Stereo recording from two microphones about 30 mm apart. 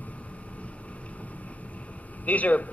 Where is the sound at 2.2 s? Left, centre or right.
Left.